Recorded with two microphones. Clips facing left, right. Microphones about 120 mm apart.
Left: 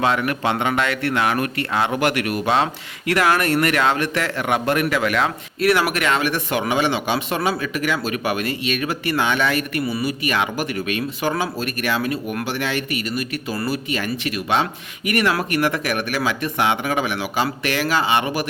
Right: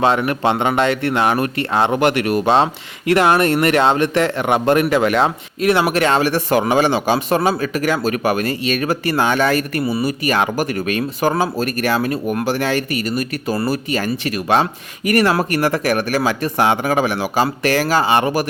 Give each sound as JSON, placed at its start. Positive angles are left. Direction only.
{"t": 0.0, "sound": "a man's voice", "side_deg": -30}